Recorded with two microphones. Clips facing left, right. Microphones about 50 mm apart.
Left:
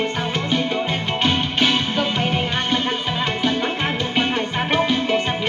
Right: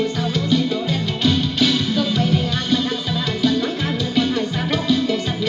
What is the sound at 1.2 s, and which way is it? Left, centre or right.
Music, left.